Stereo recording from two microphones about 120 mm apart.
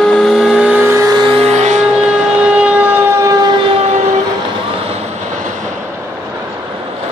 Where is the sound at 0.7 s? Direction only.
20° right (ahead or behind).